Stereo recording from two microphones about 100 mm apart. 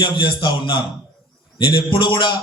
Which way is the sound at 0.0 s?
60° left (ahead or behind).